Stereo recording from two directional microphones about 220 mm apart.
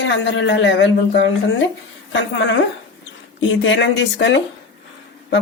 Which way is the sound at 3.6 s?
55° left (ahead or behind).